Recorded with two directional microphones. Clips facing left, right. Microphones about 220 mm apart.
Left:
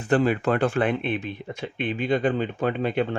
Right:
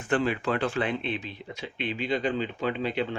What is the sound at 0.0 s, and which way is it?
Speech, 40° left (ahead or behind).